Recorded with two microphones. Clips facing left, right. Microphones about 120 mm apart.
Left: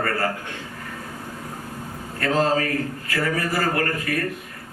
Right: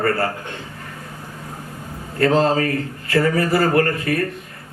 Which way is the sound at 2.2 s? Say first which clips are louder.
Right 5 dB; 30° right (ahead or behind).